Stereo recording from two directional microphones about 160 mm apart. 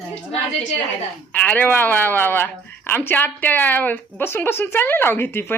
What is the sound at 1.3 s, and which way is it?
Speech, 10° left (ahead or behind).